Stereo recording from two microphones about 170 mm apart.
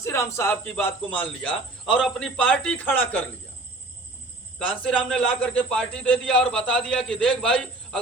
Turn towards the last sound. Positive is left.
turn(degrees=5)  # may be behind; listen again after turning